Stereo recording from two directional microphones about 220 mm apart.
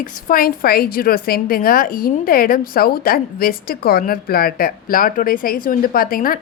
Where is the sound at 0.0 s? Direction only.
40° left (ahead or behind).